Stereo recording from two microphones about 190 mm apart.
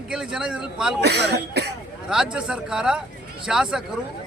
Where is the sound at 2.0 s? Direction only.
5° right (ahead or behind).